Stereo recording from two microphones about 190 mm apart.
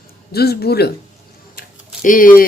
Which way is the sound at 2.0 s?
45° left (ahead or behind).